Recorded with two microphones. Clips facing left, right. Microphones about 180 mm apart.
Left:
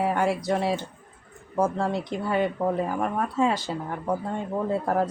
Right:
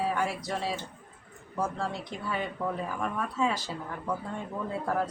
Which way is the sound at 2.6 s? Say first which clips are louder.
Left 7 dB; 50° left (ahead or behind).